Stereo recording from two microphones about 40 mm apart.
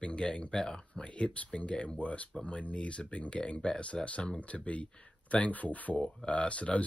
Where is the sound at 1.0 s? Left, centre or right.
Left.